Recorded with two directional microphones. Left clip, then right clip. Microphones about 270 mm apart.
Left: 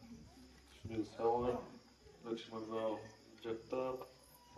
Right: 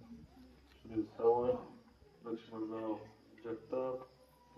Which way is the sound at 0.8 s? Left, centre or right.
Left.